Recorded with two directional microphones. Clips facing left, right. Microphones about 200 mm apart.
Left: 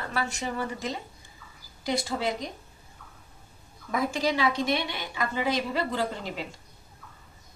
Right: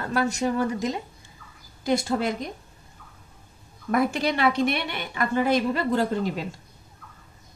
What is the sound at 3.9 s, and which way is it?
A woman's voice, 65° right (ahead or behind).